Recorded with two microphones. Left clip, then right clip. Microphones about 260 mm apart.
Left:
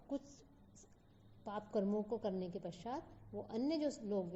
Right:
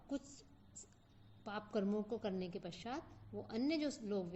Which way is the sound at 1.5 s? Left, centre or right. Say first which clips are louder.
Left 1 dB; right.